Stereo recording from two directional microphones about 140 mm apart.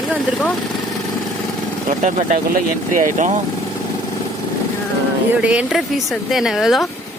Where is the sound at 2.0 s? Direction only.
55° right (ahead or behind).